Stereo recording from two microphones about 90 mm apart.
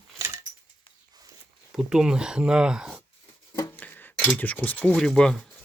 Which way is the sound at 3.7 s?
20° left (ahead or behind).